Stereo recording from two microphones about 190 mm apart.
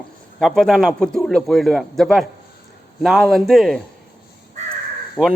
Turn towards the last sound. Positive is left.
turn(degrees=0)  # may be behind; listen again after turning